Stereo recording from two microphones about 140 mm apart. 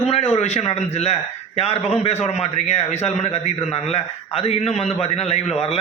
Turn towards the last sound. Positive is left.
turn(degrees=50)  # may be behind; listen again after turning